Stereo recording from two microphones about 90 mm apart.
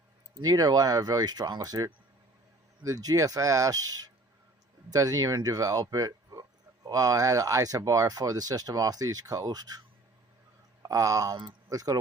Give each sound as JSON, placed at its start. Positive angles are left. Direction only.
{"t": 0.4, "sound": "speech", "side_deg": -45}
{"t": 10.8, "sound": "speech", "side_deg": -40}